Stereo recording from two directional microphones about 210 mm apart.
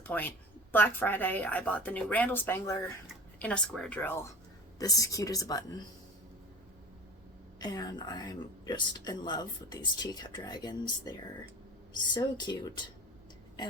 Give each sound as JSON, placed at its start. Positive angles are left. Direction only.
{"t": 0.0, "sound": "speech", "side_deg": 10}
{"t": 7.6, "sound": "speech", "side_deg": 20}